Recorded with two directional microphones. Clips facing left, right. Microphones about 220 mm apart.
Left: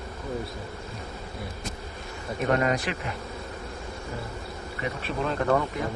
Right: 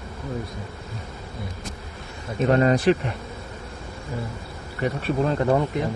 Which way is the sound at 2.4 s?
30° right (ahead or behind).